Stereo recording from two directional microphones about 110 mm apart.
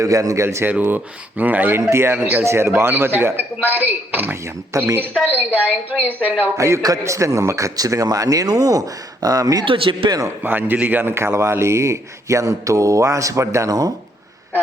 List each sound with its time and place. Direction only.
0.0 s a man's voice: 30° right (ahead or behind)
6.6 s a man's voice: 25° right (ahead or behind)
9.6 s speech: 55° right (ahead or behind)
10.1 s a man's voice: 30° right (ahead or behind)
10.4 s a man's voice: 20° right (ahead or behind); by 13.9 s 35° right (ahead or behind)